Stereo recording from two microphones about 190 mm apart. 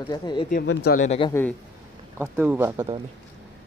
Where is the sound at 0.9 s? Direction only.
40° left (ahead or behind).